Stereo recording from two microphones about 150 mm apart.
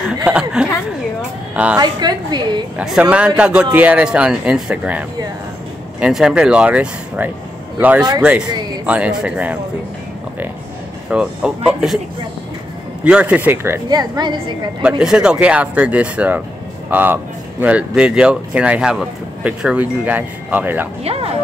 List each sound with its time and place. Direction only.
0.2 s a woman's voice: 5° right (ahead or behind)
1.8 s a woman's voice: 30° right (ahead or behind)
2.8 s speech: 5° right (ahead or behind)
11.1 s speech: 5° right (ahead or behind)
13.0 s speech: 10° right (ahead or behind)
13.8 s a woman's voice: 25° right (ahead or behind)
14.8 s speech: 5° right (ahead or behind)
21.0 s speech: 40° right (ahead or behind)